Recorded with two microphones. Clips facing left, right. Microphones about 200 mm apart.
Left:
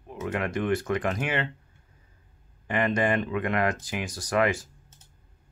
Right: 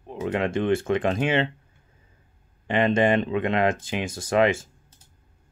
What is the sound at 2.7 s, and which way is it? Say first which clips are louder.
Speech: right 5 dB; 25° right (ahead or behind).